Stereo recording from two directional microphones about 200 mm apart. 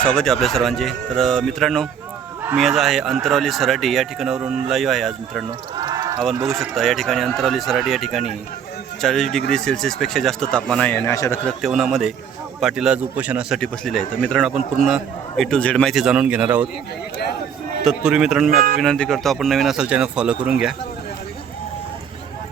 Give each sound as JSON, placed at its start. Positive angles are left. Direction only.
{"t": 0.0, "sound": "speech", "side_deg": 5}
{"t": 5.5, "sound": "a sound", "side_deg": -20}
{"t": 6.5, "sound": "speech", "side_deg": 0}
{"t": 11.4, "sound": "speech", "side_deg": 0}
{"t": 17.8, "sound": "speech", "side_deg": -5}
{"t": 18.5, "sound": "speech", "side_deg": -45}
{"t": 18.8, "sound": "speech", "side_deg": 0}